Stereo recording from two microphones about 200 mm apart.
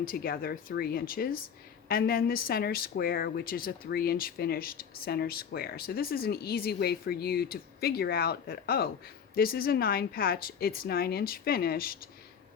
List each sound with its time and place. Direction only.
0.0 s a woman's voice: 45° left (ahead or behind)